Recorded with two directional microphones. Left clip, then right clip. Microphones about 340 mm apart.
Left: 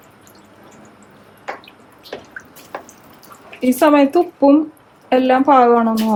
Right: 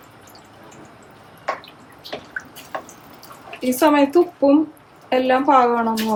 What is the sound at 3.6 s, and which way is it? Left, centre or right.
Speech, centre.